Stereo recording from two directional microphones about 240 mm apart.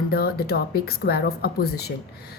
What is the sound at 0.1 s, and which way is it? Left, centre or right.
A woman's voice, left.